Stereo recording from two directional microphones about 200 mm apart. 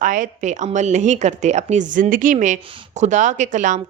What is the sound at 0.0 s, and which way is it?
A woman's voice, 40° right (ahead or behind).